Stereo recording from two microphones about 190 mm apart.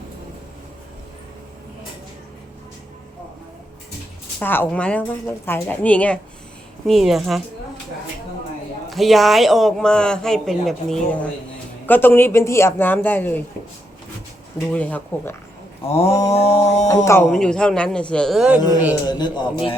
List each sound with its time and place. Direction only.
4.4 s a woman's voice: 10° left (ahead or behind)
8.9 s a woman's voice: centre (ahead or behind)
14.7 s a woman's voice: 10° left (ahead or behind)
15.9 s a sound: 35° left (ahead or behind)
17.2 s speech: centre (ahead or behind)
19.0 s a man's voice: 20° left (ahead or behind)